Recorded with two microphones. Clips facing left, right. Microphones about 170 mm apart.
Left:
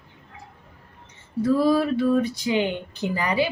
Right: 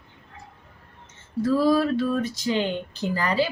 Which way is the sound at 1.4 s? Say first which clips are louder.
Left 1 dB; 15° left (ahead or behind).